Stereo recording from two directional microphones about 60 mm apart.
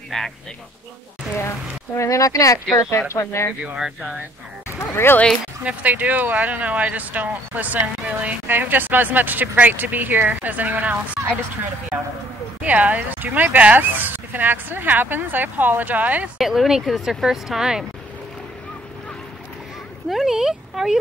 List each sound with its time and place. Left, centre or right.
0.1 s speech: centre
1.3 s speech: left
3.1 s speech: left
3.6 s speech: centre
4.9 s speech: left
5.6 s speech: right
12.6 s speech: right
16.3 s speech: centre
20.1 s speech: centre